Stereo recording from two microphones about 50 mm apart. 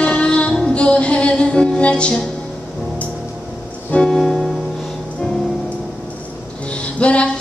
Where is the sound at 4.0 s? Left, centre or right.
Centre.